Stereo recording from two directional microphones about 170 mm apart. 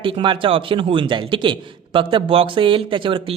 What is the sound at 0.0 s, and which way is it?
A man's voice, 30° right (ahead or behind).